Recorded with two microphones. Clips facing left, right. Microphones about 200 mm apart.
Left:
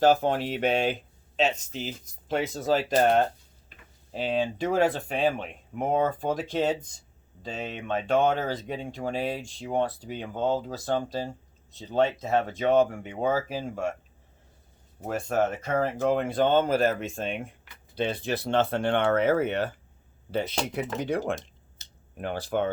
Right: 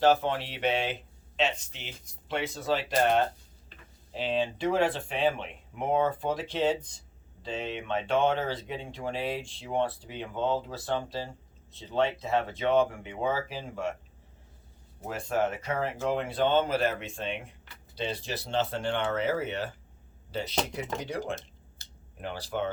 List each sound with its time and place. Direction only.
0.0 s speech: 45° left (ahead or behind)
15.0 s speech: 45° left (ahead or behind)